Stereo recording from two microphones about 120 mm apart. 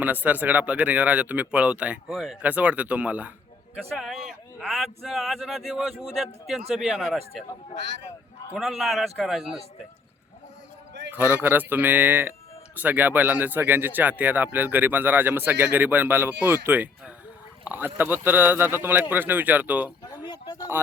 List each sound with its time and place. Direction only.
0.0 s speech: 15° right (ahead or behind)
3.9 s speech: centre (ahead or behind)
8.5 s speech: centre (ahead or behind)
11.1 s speech: 15° right (ahead or behind)
20.1 s a sound: 35° left (ahead or behind)
20.7 s speech: 20° right (ahead or behind)